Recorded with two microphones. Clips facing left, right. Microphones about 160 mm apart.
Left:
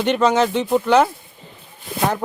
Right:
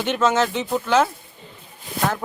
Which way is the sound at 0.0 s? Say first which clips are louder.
Left 3 dB; 5° right (ahead or behind).